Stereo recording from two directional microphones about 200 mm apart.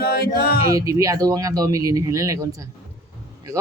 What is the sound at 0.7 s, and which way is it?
Speech, 15° right (ahead or behind).